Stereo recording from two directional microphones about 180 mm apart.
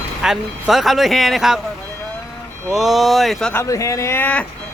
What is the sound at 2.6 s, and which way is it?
Speech, centre (ahead or behind).